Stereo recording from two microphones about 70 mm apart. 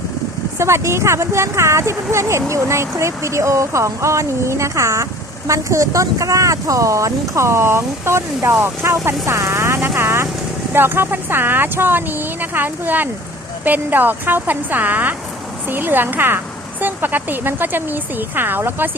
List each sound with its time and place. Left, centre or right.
0.6 s speech: right